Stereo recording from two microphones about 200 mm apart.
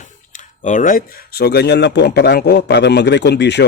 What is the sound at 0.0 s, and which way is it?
Speech, 40° left (ahead or behind).